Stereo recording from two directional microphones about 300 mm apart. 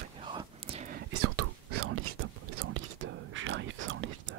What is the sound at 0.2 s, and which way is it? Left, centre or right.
Whispering, centre.